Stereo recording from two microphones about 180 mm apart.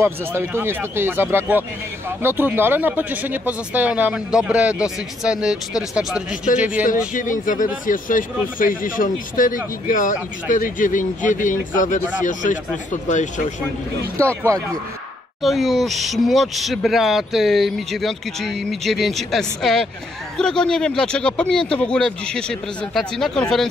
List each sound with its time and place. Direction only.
0.0 s speech: 15° right (ahead or behind)
7.2 s speech: 45° left (ahead or behind)
15.4 s speech: centre (ahead or behind)